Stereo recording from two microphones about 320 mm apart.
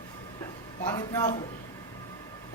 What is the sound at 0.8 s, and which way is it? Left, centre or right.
Speech, centre.